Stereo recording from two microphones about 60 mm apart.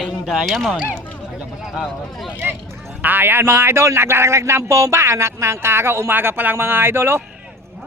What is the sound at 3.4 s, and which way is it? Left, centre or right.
Speech, right.